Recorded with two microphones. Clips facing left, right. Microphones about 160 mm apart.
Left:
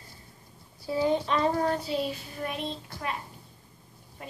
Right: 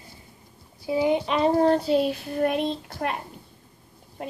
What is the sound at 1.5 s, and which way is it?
Speech, 30° right (ahead or behind).